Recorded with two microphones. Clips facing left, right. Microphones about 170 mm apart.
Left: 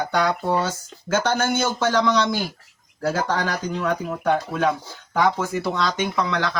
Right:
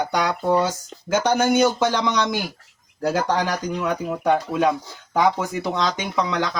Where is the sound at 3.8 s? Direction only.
10° right (ahead or behind).